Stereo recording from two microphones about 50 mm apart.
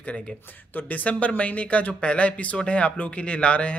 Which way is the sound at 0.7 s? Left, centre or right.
Left.